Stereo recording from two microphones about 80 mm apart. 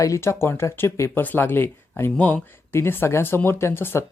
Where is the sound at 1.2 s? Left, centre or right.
Left.